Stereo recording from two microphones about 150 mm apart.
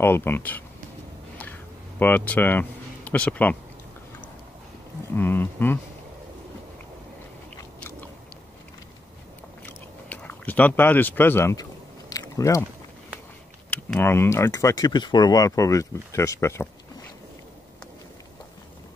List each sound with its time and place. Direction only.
0.0 s speech: 15° left (ahead or behind)
1.4 s a sound: 10° left (ahead or behind)
5.1 s speech: 15° left (ahead or behind)
9.7 s biting: 10° left (ahead or behind)
13.9 s speech: 15° left (ahead or behind)